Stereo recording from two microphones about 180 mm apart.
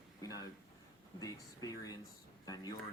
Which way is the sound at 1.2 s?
20° left (ahead or behind).